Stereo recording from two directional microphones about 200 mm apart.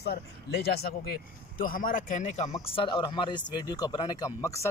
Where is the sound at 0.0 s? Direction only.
55° left (ahead or behind).